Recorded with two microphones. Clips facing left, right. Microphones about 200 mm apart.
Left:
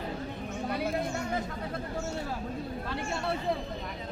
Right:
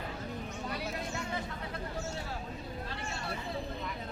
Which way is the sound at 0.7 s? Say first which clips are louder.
Left 9 dB; 55° left (ahead or behind).